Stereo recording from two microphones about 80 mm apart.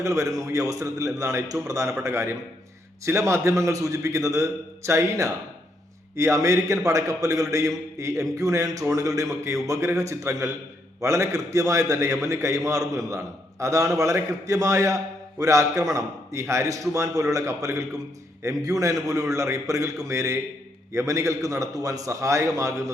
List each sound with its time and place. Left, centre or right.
0.0 s a man's voice: right